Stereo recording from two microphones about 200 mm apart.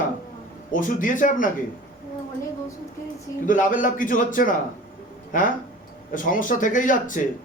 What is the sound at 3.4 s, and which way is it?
A man's voice, 40° left (ahead or behind).